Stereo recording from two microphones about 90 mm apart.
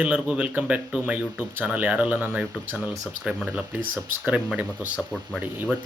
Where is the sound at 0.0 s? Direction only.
15° right (ahead or behind).